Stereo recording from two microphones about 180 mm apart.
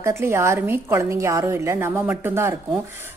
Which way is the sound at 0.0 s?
15° right (ahead or behind).